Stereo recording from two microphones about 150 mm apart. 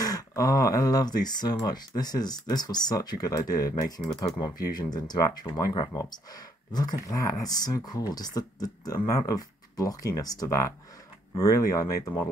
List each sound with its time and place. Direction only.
0.0 s speech: 25° left (ahead or behind)